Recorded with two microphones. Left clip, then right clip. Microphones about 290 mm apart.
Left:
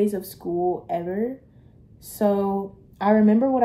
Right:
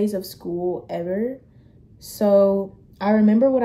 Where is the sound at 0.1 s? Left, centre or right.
Centre.